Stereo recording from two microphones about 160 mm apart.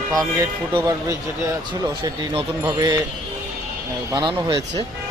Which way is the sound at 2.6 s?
25° right (ahead or behind).